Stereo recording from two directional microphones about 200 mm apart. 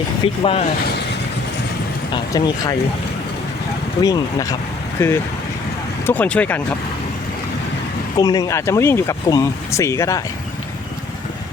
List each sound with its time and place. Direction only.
0.4 s speech: 30° left (ahead or behind)
2.1 s speech: 20° left (ahead or behind)
4.0 s speech: 15° left (ahead or behind)
8.2 s speech: 20° left (ahead or behind)